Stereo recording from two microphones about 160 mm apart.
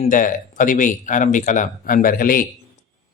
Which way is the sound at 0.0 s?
55° left (ahead or behind).